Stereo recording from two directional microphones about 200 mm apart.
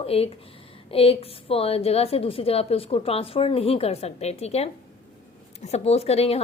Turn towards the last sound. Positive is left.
turn(degrees=30)  # may be behind; listen again after turning